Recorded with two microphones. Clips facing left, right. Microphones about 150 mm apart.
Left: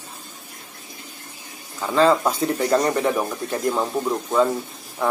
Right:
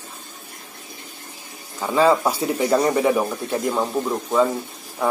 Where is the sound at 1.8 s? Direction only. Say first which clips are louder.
Even; 10° right (ahead or behind).